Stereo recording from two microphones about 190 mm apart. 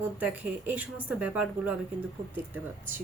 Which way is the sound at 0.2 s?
10° right (ahead or behind).